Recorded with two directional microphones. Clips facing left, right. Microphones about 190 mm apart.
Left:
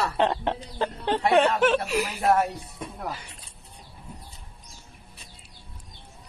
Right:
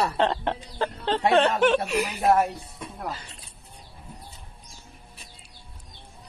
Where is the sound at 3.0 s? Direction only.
15° left (ahead or behind).